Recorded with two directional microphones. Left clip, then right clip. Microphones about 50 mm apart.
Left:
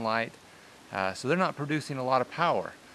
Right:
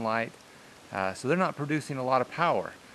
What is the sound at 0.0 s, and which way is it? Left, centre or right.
Speech, centre.